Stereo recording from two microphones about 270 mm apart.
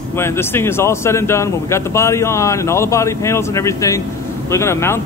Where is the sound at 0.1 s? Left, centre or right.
Centre.